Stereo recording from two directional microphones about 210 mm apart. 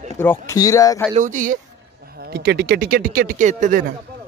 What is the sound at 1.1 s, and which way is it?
Speech, 35° right (ahead or behind).